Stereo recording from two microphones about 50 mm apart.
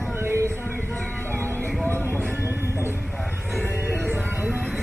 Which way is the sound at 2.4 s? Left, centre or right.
Right.